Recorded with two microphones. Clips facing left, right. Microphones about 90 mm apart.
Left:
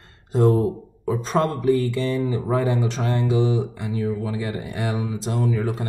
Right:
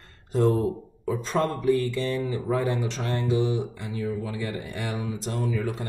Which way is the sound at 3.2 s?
90° left.